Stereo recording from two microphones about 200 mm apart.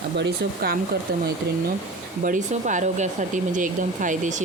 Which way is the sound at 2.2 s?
40° right (ahead or behind).